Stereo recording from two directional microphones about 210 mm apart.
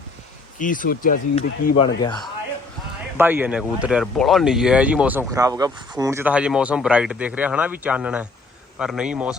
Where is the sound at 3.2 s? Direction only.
10° right (ahead or behind).